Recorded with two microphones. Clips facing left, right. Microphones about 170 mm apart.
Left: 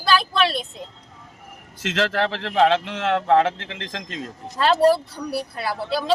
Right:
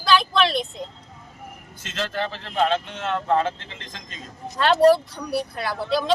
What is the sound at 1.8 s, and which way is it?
Speech, 90° left.